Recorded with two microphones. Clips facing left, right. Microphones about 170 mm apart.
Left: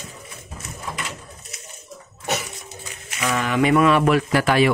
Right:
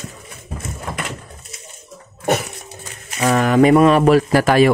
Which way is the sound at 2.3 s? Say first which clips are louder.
Right 8 dB; 55° right (ahead or behind).